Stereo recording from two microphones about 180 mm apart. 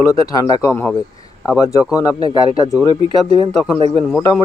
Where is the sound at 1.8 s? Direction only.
5° right (ahead or behind).